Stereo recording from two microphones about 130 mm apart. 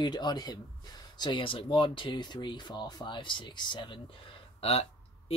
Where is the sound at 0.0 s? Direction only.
35° left (ahead or behind).